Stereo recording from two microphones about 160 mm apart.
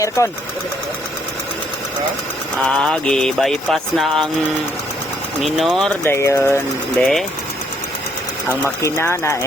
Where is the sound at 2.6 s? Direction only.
5° left (ahead or behind).